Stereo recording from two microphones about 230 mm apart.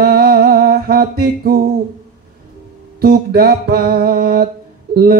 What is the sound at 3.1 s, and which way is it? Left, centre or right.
Mantra, right.